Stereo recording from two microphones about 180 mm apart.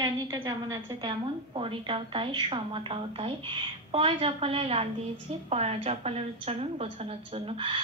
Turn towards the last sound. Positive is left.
turn(degrees=-30)  # may be behind; listen again after turning